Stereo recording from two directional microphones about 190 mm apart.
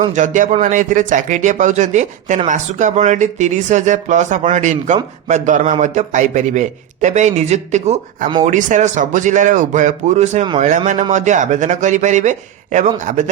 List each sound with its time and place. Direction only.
0.1 s a man's voice: 40° right (ahead or behind)